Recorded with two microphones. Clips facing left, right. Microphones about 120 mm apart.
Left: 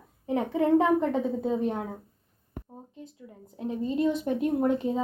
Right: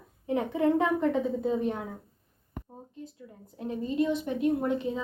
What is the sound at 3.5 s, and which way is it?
A woman's voice, 25° left (ahead or behind).